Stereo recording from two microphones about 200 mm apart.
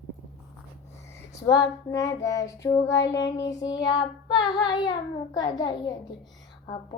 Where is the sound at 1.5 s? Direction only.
20° left (ahead or behind).